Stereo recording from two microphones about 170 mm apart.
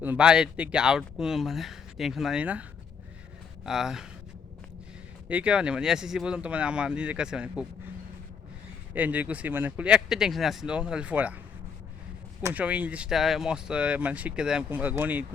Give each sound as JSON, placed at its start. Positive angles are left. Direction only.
{"t": 0.0, "sound": "speech", "side_deg": -10}
{"t": 3.7, "sound": "speech", "side_deg": -5}
{"t": 5.3, "sound": "speech", "side_deg": -5}
{"t": 9.0, "sound": "speech", "side_deg": -10}
{"t": 12.4, "sound": "speech", "side_deg": -20}